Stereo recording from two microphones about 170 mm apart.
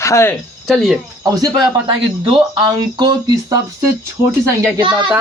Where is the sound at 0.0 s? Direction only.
15° left (ahead or behind).